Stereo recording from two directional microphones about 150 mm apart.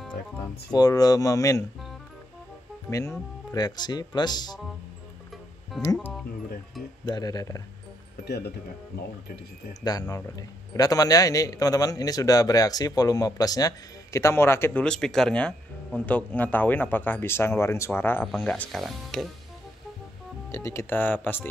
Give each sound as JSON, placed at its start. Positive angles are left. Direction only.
{"t": 0.7, "sound": "speech", "side_deg": 25}
{"t": 2.9, "sound": "speech", "side_deg": 20}
{"t": 7.1, "sound": "speech", "side_deg": 25}
{"t": 8.3, "sound": "speech", "side_deg": 90}
{"t": 9.8, "sound": "a man's voice", "side_deg": 25}
{"t": 18.7, "sound": "speech", "side_deg": 0}
{"t": 20.5, "sound": "a man's voice", "side_deg": 20}